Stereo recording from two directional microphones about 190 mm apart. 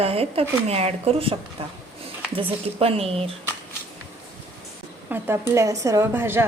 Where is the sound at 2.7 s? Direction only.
30° right (ahead or behind).